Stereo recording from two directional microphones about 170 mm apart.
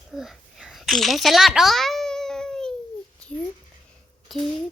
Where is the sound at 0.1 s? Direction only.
Centre (ahead or behind).